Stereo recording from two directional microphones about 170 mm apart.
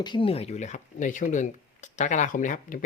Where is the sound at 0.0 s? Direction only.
30° left (ahead or behind).